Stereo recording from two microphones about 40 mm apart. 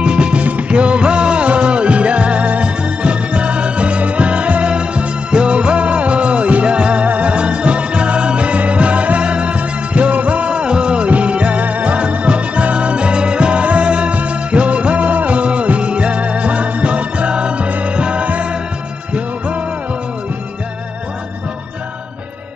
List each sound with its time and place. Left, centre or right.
0.0 s music: right